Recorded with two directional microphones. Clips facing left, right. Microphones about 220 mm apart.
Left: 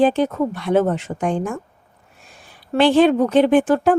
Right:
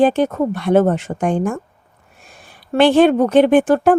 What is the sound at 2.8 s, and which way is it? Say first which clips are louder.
Speech: right 2 dB; 60° right (ahead or behind).